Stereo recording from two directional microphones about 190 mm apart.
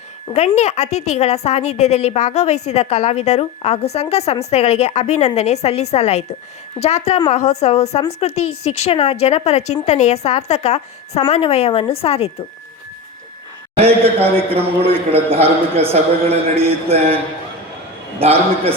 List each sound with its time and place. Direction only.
0.3 s a woman's voice: 35° left (ahead or behind)
13.7 s a man's voice: 30° right (ahead or behind)
18.2 s a man's voice: 30° right (ahead or behind)